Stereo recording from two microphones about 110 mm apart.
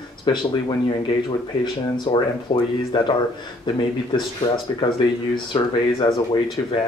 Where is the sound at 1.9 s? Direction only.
45° left (ahead or behind).